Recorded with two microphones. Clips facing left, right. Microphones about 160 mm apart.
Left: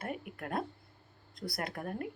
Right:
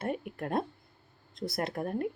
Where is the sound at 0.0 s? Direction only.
30° right (ahead or behind).